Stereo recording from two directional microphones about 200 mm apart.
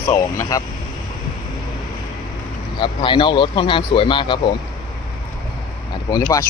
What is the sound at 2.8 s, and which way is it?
Speech, 25° left (ahead or behind).